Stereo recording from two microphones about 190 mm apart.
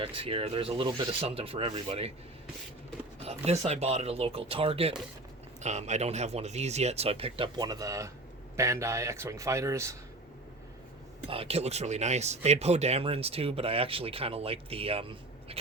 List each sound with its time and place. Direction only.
0.0 s speech: 30° right (ahead or behind)
3.2 s a man's voice: 35° right (ahead or behind); by 10.0 s 15° right (ahead or behind)
11.3 s speech: 30° right (ahead or behind)